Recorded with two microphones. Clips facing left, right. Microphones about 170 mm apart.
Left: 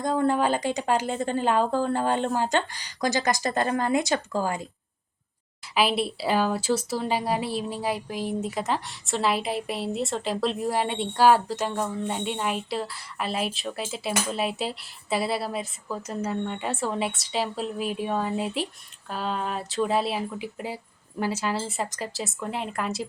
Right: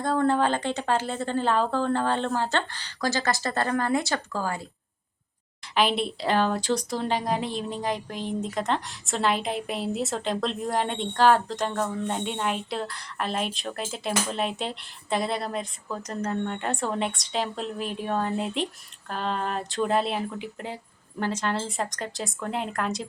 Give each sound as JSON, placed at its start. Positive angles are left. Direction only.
{"t": 0.0, "sound": "speech", "side_deg": 15}
{"t": 5.7, "sound": "a woman's voice", "side_deg": 5}